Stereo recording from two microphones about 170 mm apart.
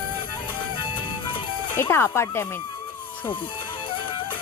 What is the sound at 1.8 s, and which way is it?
Speech, 15° left (ahead or behind).